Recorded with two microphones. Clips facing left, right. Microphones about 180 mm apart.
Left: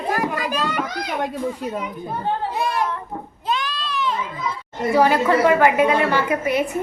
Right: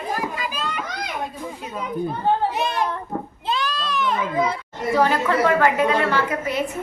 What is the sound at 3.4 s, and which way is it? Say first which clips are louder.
Children playing: left 1 dB; 35° right (ahead or behind).